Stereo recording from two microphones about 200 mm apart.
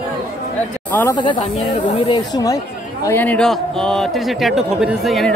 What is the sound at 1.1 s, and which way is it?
Speech, 25° left (ahead or behind).